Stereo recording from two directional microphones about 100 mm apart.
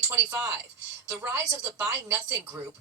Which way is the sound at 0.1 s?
20° right (ahead or behind).